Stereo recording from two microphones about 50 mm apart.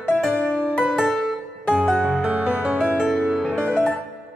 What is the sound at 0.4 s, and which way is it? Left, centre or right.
Music, left.